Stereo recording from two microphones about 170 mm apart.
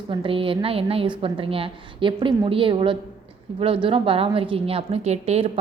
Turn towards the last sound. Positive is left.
turn(degrees=-40)  # may be behind; listen again after turning